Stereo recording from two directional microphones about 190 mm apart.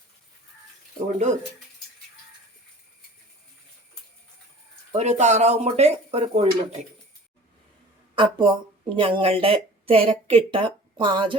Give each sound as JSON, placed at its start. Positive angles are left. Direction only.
{"t": 0.9, "sound": "speech", "side_deg": -40}
{"t": 4.9, "sound": "speech", "side_deg": -35}
{"t": 8.1, "sound": "a woman's voice", "side_deg": -25}